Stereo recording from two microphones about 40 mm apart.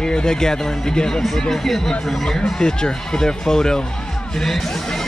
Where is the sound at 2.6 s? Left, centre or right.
Centre.